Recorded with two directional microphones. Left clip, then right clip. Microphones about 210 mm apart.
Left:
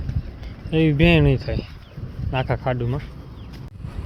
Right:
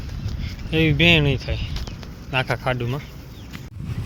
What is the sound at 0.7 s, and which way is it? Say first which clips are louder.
Speech: right 1 dB; 20° left (ahead or behind).